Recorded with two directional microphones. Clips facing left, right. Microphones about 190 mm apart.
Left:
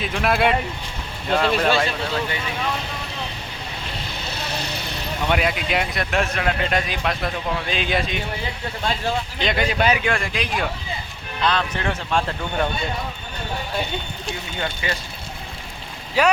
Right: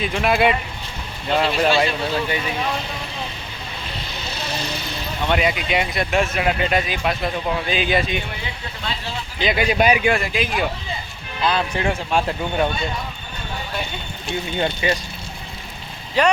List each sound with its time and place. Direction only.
0.0 s speech: centre (ahead or behind)
5.3 s speech: centre (ahead or behind)
9.4 s speech: 5° right (ahead or behind)
9.6 s speech: 15° right (ahead or behind)
14.6 s speech: 20° right (ahead or behind)
16.2 s speech: 10° left (ahead or behind)